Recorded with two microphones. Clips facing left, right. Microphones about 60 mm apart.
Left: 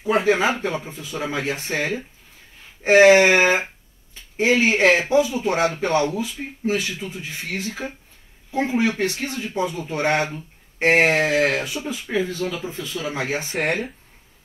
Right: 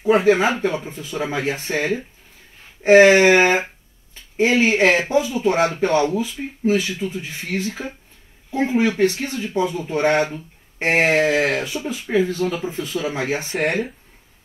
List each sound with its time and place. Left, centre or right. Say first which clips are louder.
0.0 s speech: right 3 dB; right